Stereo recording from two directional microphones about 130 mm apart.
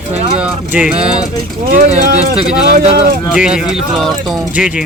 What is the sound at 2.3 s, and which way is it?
Speech, 5° right (ahead or behind).